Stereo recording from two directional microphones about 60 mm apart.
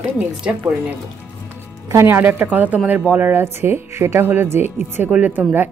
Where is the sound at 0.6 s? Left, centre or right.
Right.